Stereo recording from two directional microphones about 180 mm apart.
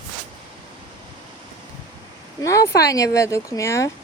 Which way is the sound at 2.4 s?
15° left (ahead or behind).